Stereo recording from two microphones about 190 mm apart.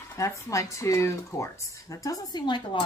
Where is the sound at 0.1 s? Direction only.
15° left (ahead or behind).